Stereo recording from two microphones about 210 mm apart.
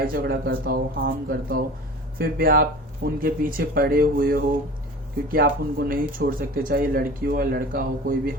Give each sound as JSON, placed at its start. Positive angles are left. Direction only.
{"t": 0.0, "sound": "speech", "side_deg": -45}